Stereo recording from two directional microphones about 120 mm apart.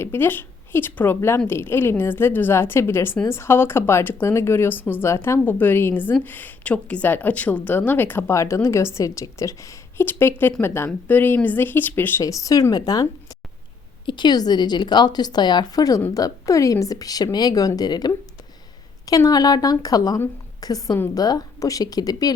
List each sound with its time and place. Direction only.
0.0 s a woman's voice: 20° left (ahead or behind)
12.2 s a woman's voice: 30° left (ahead or behind)